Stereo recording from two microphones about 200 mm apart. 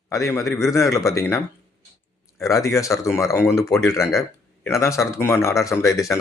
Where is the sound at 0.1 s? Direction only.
15° left (ahead or behind).